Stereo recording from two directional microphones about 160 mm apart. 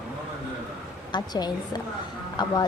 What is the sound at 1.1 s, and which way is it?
Speech, 25° left (ahead or behind).